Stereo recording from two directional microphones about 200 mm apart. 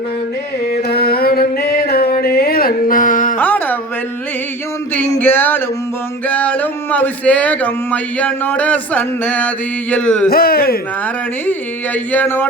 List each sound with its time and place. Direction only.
0.7 s music: 50° left (ahead or behind)
3.3 s music: 10° left (ahead or behind)
4.9 s a sound: 10° left (ahead or behind)
6.2 s speech: 5° left (ahead or behind)
9.9 s a sound: 5° left (ahead or behind)
10.2 s speech: 50° left (ahead or behind)
12.1 s speech: 10° left (ahead or behind)